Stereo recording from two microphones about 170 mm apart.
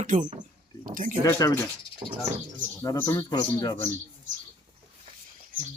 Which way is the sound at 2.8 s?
15° left (ahead or behind).